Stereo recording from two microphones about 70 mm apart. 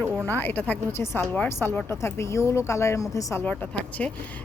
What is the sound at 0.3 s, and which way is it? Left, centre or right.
Speech, left.